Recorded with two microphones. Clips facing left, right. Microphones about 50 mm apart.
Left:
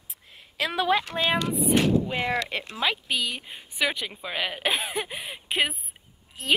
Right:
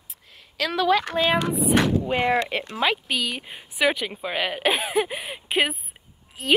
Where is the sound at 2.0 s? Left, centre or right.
Right.